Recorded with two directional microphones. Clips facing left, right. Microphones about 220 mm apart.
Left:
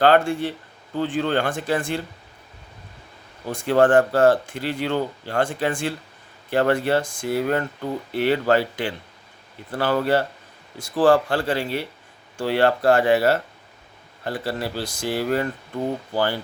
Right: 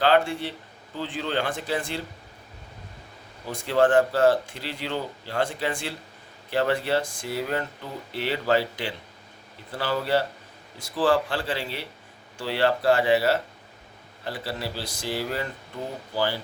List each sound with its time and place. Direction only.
0.0 s speech: 50° left (ahead or behind)
3.5 s speech: 50° left (ahead or behind)